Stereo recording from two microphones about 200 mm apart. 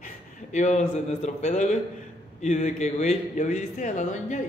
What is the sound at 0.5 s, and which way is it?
A man's voice, 35° left (ahead or behind).